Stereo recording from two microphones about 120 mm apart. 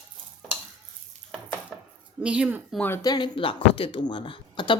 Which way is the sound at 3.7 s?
45° left (ahead or behind).